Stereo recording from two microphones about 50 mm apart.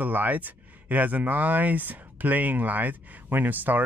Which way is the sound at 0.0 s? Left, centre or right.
Right.